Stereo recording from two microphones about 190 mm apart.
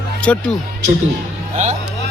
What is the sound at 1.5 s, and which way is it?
Speech, 35° right (ahead or behind).